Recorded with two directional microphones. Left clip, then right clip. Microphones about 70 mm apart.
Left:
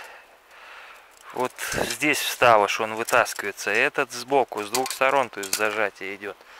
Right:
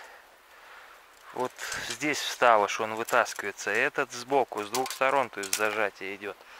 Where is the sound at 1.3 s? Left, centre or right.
Left; by 6.3 s centre.